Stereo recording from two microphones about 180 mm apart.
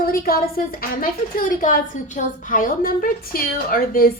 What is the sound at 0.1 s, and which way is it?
A woman's voice, 55° left (ahead or behind).